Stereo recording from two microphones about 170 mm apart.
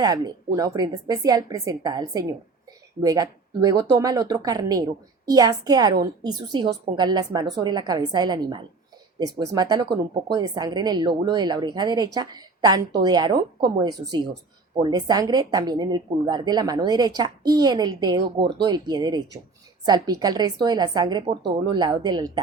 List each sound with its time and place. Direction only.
0.0 s speech: 20° right (ahead or behind)